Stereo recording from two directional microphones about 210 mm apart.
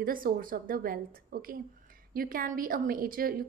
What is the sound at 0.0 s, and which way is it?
A woman's voice, 40° right (ahead or behind).